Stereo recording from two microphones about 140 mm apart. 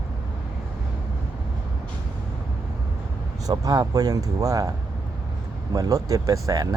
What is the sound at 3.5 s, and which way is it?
Speech, 25° right (ahead or behind).